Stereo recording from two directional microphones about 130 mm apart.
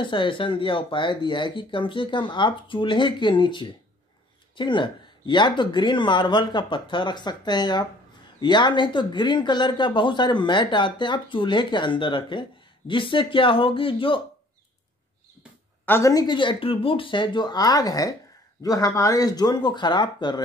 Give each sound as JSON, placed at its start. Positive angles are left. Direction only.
{"t": 0.0, "sound": "speech", "side_deg": 40}
{"t": 15.8, "sound": "speech", "side_deg": 15}
{"t": 16.1, "sound": "speech", "side_deg": 35}